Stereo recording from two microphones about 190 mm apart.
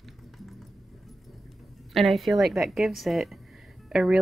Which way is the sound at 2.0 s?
Centre (ahead or behind).